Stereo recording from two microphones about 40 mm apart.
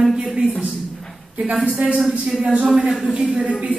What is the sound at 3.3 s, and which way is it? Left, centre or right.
Speech, right.